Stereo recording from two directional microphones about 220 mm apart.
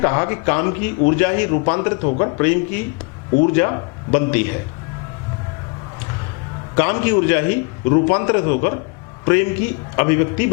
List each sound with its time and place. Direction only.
0.0 s a man's voice: 15° left (ahead or behind)
6.7 s a man's voice: 15° left (ahead or behind)